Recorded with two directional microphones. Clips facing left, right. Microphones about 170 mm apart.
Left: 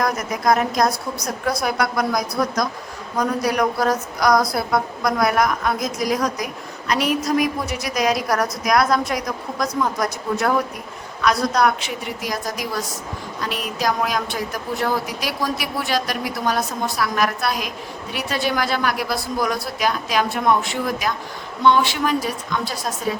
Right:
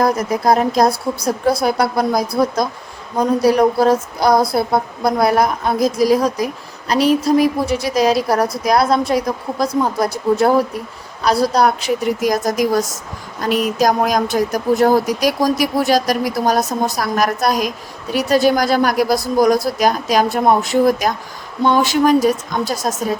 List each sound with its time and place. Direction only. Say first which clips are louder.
0.0 s a woman's voice: right 5 dB; 30° right (ahead or behind)